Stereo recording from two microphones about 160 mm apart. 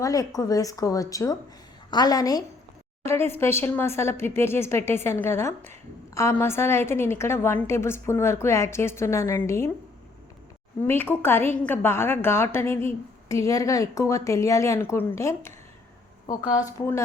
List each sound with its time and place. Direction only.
0.0 s a woman's voice: 20° left (ahead or behind)
10.8 s a woman's voice: 15° left (ahead or behind)